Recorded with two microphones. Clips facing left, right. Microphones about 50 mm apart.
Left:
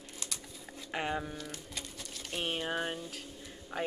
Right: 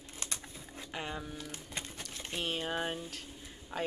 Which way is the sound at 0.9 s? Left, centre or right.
Left.